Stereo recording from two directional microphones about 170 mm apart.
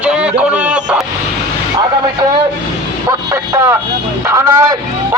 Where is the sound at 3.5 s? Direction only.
15° right (ahead or behind).